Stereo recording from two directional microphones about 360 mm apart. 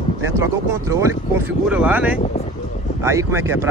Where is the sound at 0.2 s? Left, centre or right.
Centre.